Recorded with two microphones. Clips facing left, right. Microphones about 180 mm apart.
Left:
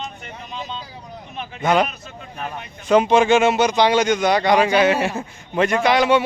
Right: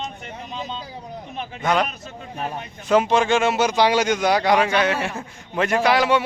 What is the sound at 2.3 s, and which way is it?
Speech, 30° right (ahead or behind).